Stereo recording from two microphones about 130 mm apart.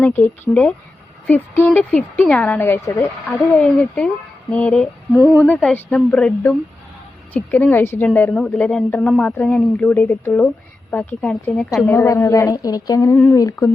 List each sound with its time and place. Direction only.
0.0 s a woman's voice: 15° left (ahead or behind)
3.2 s a woman's voice: 10° left (ahead or behind)
11.8 s a woman's voice: 25° left (ahead or behind)